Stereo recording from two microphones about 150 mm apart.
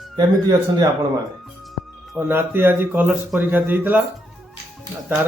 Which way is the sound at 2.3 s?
15° right (ahead or behind).